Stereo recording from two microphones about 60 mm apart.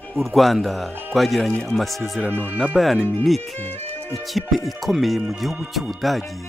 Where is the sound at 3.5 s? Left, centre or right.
Left.